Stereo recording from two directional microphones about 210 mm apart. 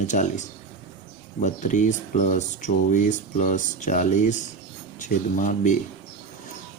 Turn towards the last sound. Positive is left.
turn(degrees=35)  # may be behind; listen again after turning